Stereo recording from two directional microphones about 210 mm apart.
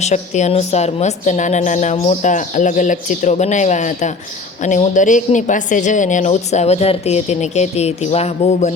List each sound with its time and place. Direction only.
0.0 s a woman's voice: 35° left (ahead or behind)